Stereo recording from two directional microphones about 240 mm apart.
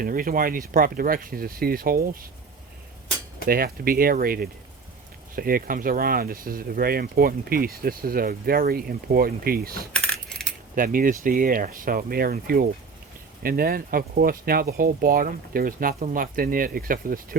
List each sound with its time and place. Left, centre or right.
0.0 s speech: right
3.4 s speech: right
9.9 s coin: centre
10.8 s speech: right